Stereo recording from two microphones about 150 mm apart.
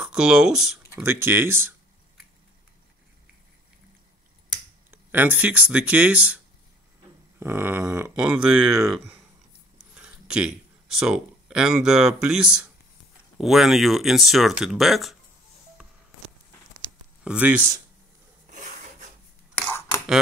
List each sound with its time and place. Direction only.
0.0 s speech: 5° right (ahead or behind)
1.0 s speech: 15° right (ahead or behind)
4.9 s speech: 15° right (ahead or behind)
8.2 s speech: 5° right (ahead or behind)
17.2 s speech: 10° right (ahead or behind)
18.5 s filing: 55° right (ahead or behind)
19.7 s cutlery: 20° left (ahead or behind)